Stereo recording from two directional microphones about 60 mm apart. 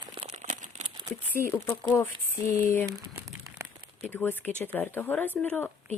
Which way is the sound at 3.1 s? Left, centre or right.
Right.